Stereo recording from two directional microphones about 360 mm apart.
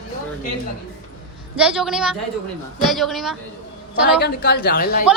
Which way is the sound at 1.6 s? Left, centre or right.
Centre.